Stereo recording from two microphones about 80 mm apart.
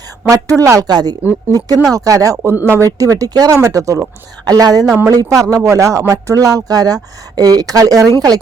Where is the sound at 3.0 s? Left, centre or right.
Right.